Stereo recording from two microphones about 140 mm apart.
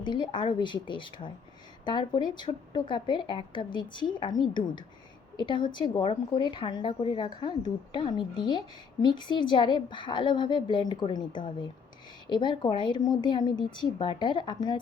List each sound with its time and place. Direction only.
0.0 s a woman's voice: 35° left (ahead or behind)